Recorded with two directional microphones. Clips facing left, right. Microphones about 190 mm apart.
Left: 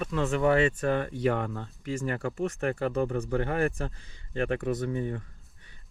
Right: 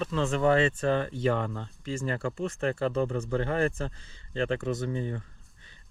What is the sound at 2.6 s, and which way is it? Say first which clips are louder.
Speech: right 2 dB; 30° right (ahead or behind).